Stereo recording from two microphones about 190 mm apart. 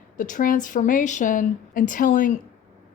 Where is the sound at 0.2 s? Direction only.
45° left (ahead or behind).